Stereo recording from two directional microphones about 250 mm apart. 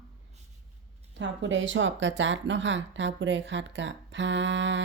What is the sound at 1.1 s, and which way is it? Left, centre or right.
Speech, right.